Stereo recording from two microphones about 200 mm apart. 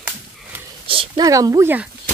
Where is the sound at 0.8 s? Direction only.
25° right (ahead or behind).